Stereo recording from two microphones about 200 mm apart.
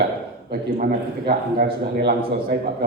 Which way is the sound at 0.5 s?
45° right (ahead or behind).